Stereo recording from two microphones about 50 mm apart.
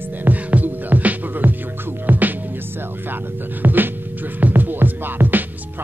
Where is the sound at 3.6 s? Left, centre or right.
Right.